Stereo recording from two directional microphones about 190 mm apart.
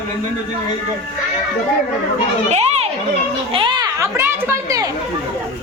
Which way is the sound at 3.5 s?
25° right (ahead or behind).